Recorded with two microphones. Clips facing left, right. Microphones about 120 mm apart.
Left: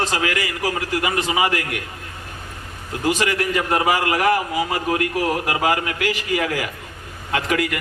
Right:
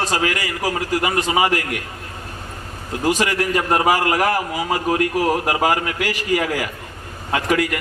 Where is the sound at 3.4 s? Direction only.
35° right (ahead or behind).